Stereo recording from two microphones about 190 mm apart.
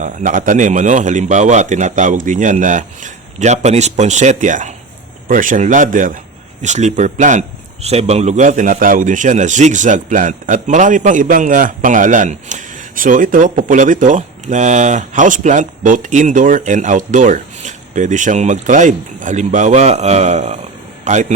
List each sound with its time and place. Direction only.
0.0 s a man's voice: 40° right (ahead or behind)